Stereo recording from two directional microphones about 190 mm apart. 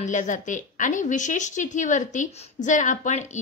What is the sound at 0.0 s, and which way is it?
A woman's voice, 40° left (ahead or behind).